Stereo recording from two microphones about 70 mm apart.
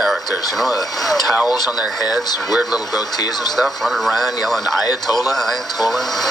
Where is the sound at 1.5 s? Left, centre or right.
Left.